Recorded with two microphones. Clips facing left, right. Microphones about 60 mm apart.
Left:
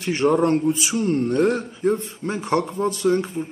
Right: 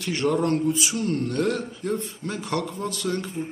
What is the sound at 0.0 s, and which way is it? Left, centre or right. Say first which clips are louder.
Speech: left 5 dB; left.